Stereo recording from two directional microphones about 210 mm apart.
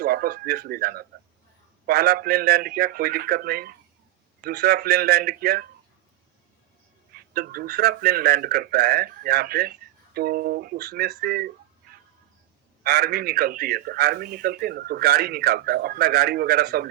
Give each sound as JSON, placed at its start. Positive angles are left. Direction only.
{"t": 0.0, "sound": "a man's voice", "side_deg": -45}
{"t": 7.1, "sound": "a man's voice", "side_deg": -45}
{"t": 12.8, "sound": "a man's voice", "side_deg": -50}